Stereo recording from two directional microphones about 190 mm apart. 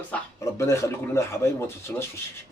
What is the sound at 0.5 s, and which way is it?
Speech, 15° left (ahead or behind).